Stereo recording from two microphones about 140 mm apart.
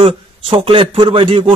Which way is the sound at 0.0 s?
40° right (ahead or behind).